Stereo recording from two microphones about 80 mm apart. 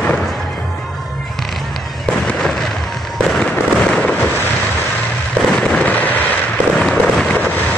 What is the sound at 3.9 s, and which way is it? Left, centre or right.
Fireworks, centre.